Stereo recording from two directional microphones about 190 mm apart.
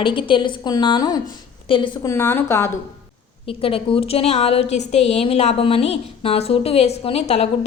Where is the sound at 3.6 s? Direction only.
30° left (ahead or behind).